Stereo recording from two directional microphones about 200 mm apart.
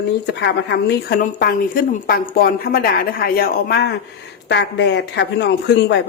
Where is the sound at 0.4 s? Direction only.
60° left (ahead or behind).